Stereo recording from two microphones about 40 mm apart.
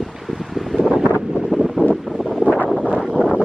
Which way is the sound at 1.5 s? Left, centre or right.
Left.